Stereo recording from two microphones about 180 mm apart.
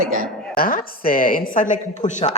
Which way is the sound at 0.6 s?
50° left (ahead or behind).